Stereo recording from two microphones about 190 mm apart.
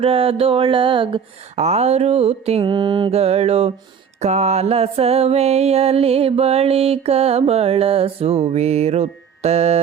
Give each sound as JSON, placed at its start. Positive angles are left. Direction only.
{"t": 0.0, "sound": "mantra", "side_deg": -30}